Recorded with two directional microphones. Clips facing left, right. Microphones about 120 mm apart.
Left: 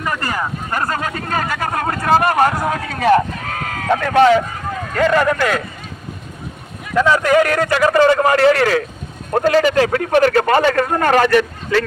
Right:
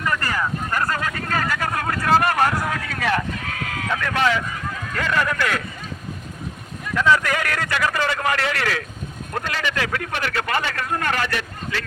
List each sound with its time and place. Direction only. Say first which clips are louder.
0.0 s speech: left 2 dB; 20° left (ahead or behind)
6.9 s speech: left 6 dB; 30° left (ahead or behind); by 11.9 s 50° left (ahead or behind)